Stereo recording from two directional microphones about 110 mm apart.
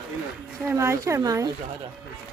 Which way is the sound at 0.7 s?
25° right (ahead or behind).